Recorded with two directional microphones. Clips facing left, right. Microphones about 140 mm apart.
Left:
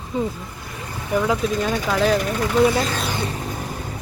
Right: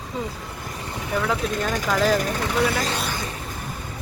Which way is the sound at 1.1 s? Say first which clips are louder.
Left 4 dB; 10° left (ahead or behind).